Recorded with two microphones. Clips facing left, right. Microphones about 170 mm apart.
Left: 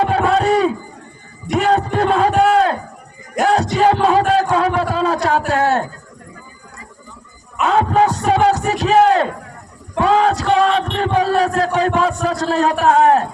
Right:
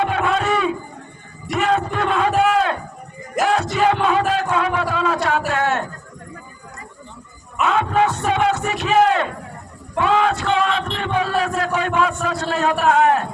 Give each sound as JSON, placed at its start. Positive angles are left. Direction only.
{"t": 0.0, "sound": "a sound", "side_deg": 35}
{"t": 1.5, "sound": "music", "side_deg": 35}
{"t": 2.4, "sound": "a sound", "side_deg": 35}
{"t": 3.4, "sound": "music", "side_deg": 35}
{"t": 5.5, "sound": "a sound", "side_deg": 35}
{"t": 7.6, "sound": "music", "side_deg": 35}
{"t": 10.0, "sound": "music", "side_deg": 35}
{"t": 10.9, "sound": "crowd", "side_deg": 35}
{"t": 11.6, "sound": "a man's voice", "side_deg": 35}